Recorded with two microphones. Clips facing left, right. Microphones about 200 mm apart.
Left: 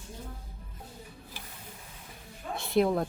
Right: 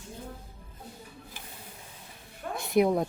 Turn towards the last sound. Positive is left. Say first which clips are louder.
# right 2 dB
turn(degrees=-20)  # may be behind; listen again after turning